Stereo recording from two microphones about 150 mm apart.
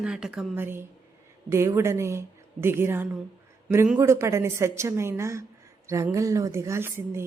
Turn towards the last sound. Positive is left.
turn(degrees=-15)  # may be behind; listen again after turning